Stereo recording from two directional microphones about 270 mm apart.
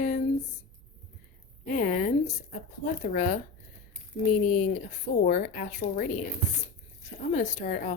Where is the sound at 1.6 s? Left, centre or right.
Left.